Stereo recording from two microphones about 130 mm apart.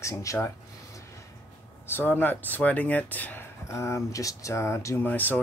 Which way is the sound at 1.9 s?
15° left (ahead or behind).